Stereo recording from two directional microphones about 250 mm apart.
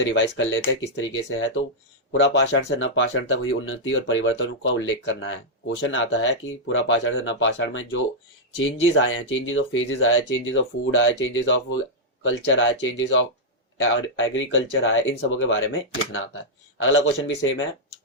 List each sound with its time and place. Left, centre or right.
0.1 s speech: left
16.8 s speech: left